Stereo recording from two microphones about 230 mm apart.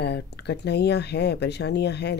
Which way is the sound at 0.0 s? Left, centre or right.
Left.